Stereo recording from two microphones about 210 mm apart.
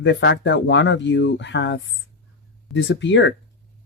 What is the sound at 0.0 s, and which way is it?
Speech, 60° left (ahead or behind).